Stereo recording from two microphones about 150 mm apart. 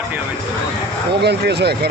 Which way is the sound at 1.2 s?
90° right.